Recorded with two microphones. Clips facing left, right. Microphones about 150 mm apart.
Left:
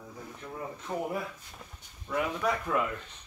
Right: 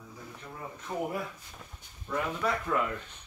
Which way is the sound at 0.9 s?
15° left (ahead or behind).